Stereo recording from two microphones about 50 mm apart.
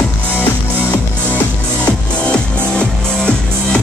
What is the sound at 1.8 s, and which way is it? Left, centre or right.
Music, left.